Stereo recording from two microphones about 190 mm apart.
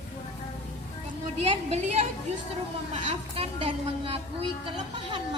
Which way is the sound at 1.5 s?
35° right (ahead or behind).